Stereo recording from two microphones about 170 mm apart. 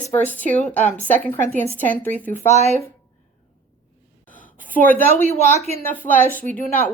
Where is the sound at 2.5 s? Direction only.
40° left (ahead or behind).